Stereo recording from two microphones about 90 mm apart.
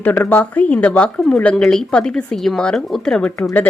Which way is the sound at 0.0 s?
20° left (ahead or behind).